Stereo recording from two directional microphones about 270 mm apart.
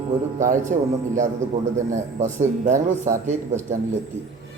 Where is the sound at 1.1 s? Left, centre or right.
Right.